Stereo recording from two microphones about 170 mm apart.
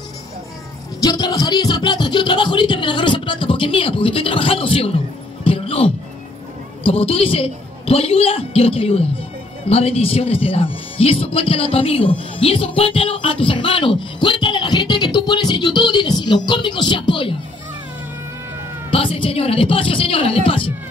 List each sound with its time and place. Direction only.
1.0 s music: 20° left (ahead or behind)
6.8 s speech: 35° left (ahead or behind)
18.9 s speech: 30° left (ahead or behind)